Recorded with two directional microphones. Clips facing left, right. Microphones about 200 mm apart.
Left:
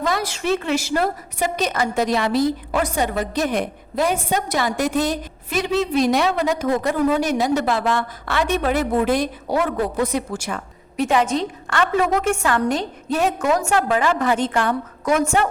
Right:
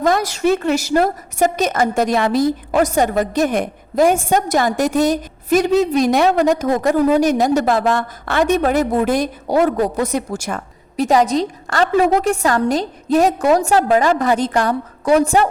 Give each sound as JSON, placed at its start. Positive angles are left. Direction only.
{"t": 0.0, "sound": "a woman's voice", "side_deg": -45}